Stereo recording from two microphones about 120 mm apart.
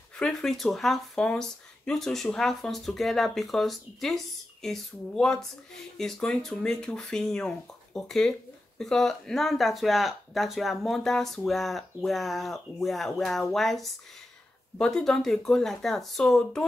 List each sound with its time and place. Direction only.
0.2 s speech: 5° left (ahead or behind)